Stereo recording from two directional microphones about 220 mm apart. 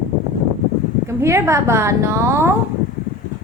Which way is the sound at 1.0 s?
15° right (ahead or behind).